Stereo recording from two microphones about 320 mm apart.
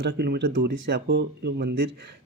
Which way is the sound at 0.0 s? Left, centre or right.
Right.